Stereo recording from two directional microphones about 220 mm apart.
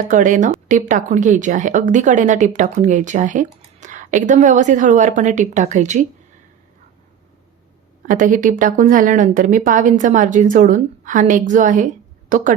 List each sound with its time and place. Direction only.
0.1 s speech: 35° right (ahead or behind)
8.0 s speech: 35° right (ahead or behind)